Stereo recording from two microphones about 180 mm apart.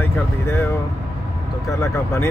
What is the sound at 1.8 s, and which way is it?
Speech, 15° left (ahead or behind).